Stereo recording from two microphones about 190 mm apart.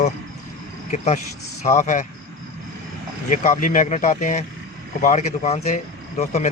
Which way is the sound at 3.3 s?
45° left (ahead or behind).